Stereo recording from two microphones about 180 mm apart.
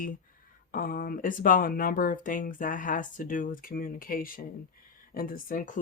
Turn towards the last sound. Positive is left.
turn(degrees=45)  # may be behind; listen again after turning